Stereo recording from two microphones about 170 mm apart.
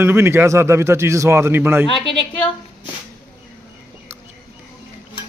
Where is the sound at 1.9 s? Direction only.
30° left (ahead or behind).